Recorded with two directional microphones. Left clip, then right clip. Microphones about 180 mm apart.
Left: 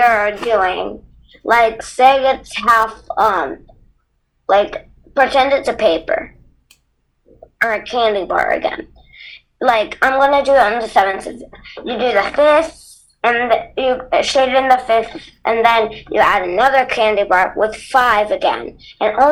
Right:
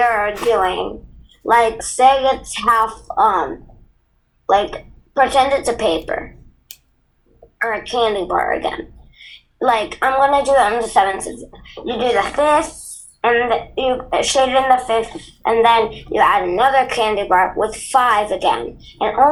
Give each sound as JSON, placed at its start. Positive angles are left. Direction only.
{"t": 0.0, "sound": "speech", "side_deg": 25}
{"t": 7.6, "sound": "speech", "side_deg": 25}